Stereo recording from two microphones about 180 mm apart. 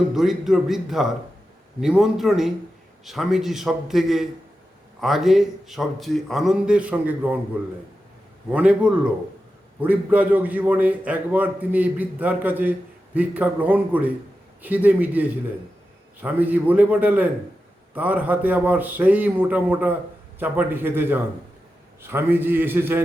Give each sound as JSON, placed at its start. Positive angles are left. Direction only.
{"t": 0.1, "sound": "a man's voice", "side_deg": 0}